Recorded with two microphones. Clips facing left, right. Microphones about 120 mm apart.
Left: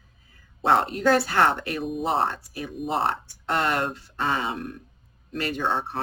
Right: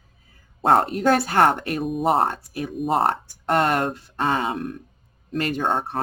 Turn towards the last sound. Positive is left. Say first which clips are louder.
# right 3 dB
turn(degrees=-45)  # may be behind; listen again after turning